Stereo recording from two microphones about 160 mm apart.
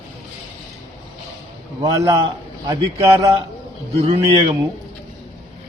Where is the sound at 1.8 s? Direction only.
25° right (ahead or behind).